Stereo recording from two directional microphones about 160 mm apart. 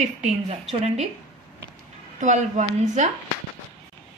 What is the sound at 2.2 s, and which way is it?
Speech, 50° right (ahead or behind).